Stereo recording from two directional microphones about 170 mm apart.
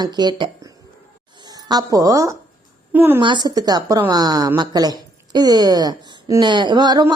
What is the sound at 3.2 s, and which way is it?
A woman's voice, 25° right (ahead or behind).